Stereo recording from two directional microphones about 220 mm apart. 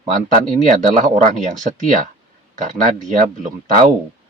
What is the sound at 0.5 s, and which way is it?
Speech, 35° right (ahead or behind).